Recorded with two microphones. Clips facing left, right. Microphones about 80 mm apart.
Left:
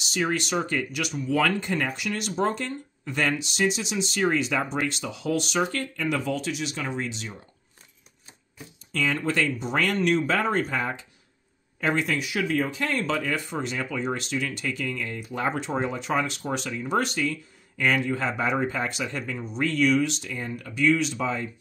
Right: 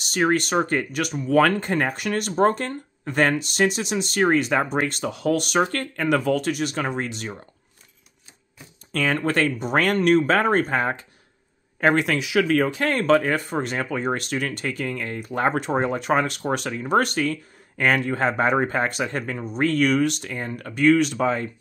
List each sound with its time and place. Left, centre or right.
0.0 s speech: right
8.9 s speech: right
11.8 s speech: right
12.8 s speech: right